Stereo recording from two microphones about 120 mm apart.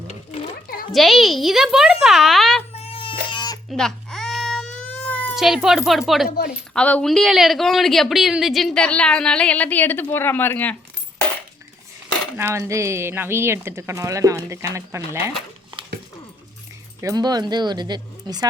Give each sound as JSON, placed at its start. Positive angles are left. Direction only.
{"t": 0.9, "sound": "a child's voice", "side_deg": 0}
{"t": 2.7, "sound": "baby cry", "side_deg": 55}
{"t": 3.7, "sound": "baby cry", "side_deg": 5}
{"t": 5.3, "sound": "cat", "side_deg": -5}
{"t": 5.6, "sound": "a child's voice", "side_deg": 0}
{"t": 6.7, "sound": "a woman's voice", "side_deg": 10}
{"t": 12.4, "sound": "speech", "side_deg": -20}
{"t": 17.0, "sound": "speech", "side_deg": -30}